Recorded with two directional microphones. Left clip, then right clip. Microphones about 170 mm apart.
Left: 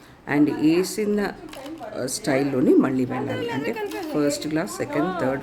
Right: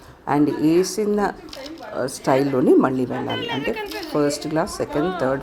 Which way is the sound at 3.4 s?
50° left (ahead or behind).